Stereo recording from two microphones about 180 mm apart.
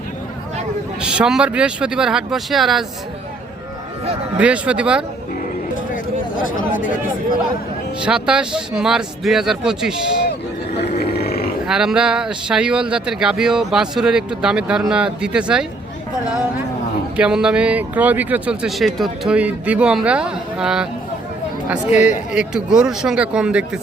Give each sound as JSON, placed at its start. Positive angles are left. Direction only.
{"t": 1.0, "sound": "speech", "side_deg": -5}
{"t": 4.4, "sound": "speech", "side_deg": -5}
{"t": 5.9, "sound": "chatter", "side_deg": 50}
{"t": 7.9, "sound": "speech", "side_deg": -5}
{"t": 10.8, "sound": "a sound", "side_deg": 60}
{"t": 11.6, "sound": "speech", "side_deg": -5}
{"t": 17.2, "sound": "speech", "side_deg": -5}
{"t": 22.3, "sound": "speech", "side_deg": -5}